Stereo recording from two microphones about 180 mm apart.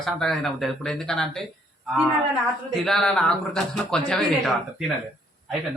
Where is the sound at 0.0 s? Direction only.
Centre (ahead or behind).